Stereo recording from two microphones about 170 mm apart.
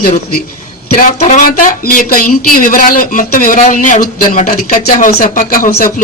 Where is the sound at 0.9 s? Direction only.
50° left (ahead or behind).